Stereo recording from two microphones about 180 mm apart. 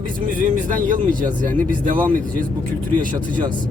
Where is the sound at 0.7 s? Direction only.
45° right (ahead or behind).